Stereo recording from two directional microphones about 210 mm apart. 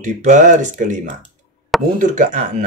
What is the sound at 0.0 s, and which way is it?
Speech, 35° right (ahead or behind).